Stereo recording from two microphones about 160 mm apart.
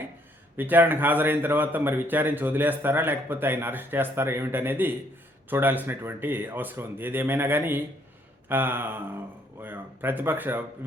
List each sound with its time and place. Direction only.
0.5 s speech: 10° right (ahead or behind)